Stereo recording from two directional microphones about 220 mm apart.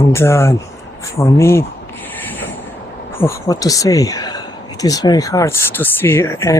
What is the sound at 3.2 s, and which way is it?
Speech, 15° left (ahead or behind).